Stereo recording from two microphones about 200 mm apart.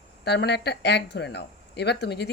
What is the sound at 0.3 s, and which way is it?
Speech, 55° left (ahead or behind).